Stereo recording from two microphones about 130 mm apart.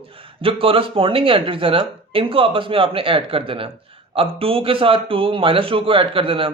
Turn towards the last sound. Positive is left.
turn(degrees=-45)  # may be behind; listen again after turning